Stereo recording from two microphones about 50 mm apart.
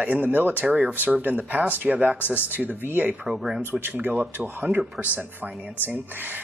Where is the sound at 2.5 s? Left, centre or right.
Right.